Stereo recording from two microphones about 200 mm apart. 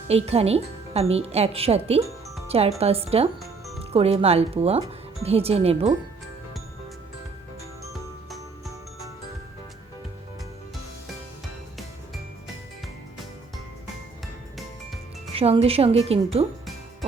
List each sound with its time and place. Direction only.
0.3 s speech: 30° right (ahead or behind)
15.3 s speech: 30° right (ahead or behind)